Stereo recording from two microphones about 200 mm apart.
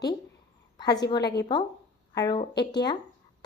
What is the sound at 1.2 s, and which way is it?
Speech, 55° left (ahead or behind).